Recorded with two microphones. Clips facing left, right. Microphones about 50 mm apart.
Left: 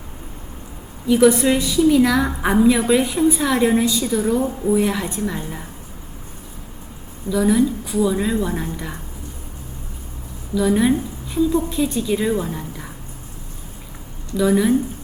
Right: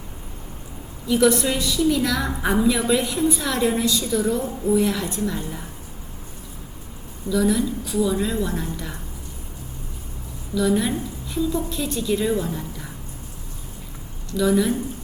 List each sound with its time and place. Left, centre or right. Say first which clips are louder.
1.0 s a woman's voice: left 4 dB; centre
7.3 s a woman's voice: left 4 dB; centre
10.7 s a woman's voice: left 6 dB; centre
14.3 s a woman's voice: left 3 dB; centre